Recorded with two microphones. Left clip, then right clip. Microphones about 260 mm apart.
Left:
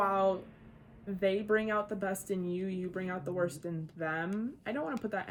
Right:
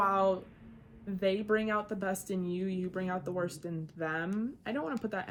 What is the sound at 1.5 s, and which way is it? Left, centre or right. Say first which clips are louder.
Speech: even; right.